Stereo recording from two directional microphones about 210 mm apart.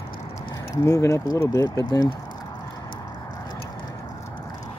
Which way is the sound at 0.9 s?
15° left (ahead or behind).